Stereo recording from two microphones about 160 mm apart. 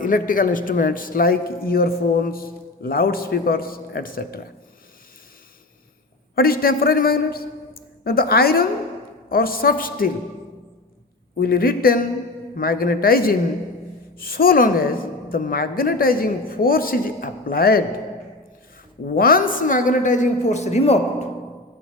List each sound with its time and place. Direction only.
0.0 s a man's voice: 60° left (ahead or behind)
6.3 s a man's voice: 70° left (ahead or behind)
11.3 s a man's voice: 65° left (ahead or behind)
19.0 s a woman's voice: 65° left (ahead or behind); by 21.0 s 40° left (ahead or behind)